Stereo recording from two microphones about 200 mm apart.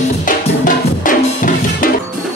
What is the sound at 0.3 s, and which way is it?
Music, 40° left (ahead or behind).